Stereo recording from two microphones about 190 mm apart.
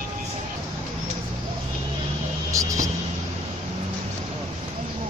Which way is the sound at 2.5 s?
15° right (ahead or behind).